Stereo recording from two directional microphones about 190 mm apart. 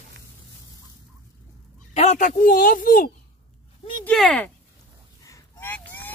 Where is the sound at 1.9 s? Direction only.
35° left (ahead or behind).